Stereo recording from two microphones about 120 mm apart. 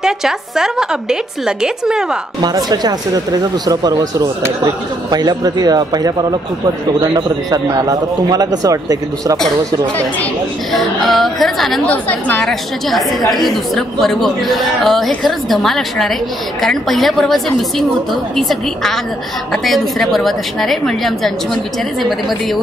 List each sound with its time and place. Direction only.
0.0 s speech: 5° right (ahead or behind)
2.4 s a man's voice: 35° right (ahead or behind)
5.1 s a man's voice: 35° right (ahead or behind)
10.7 s speech: centre (ahead or behind)
11.9 s a woman's voice: 10° left (ahead or behind)
13.3 s speech: centre (ahead or behind)